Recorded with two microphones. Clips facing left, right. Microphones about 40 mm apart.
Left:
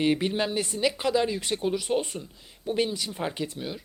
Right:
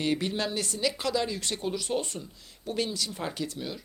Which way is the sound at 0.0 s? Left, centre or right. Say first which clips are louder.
Left 4 dB; left.